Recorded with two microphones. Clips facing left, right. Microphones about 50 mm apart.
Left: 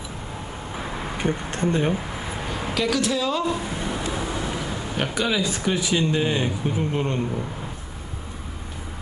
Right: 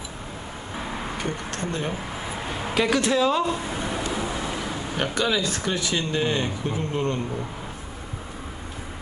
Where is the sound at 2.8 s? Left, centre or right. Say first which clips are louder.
Right 2 dB; right.